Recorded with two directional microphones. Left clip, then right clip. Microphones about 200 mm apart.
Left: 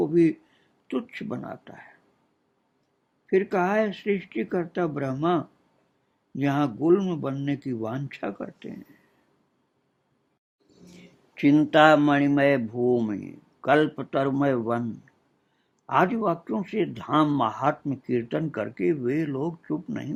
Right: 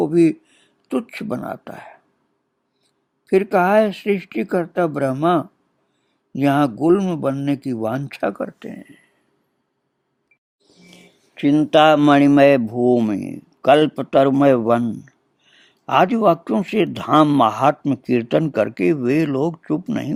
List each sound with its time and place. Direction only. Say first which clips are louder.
0.0 s speech: right 6 dB; 35° right (ahead or behind)
3.2 s speech: right 8 dB; 35° right (ahead or behind)
11.3 s speech: right 3 dB; 15° right (ahead or behind)
11.7 s speech: right 6 dB; 40° right (ahead or behind)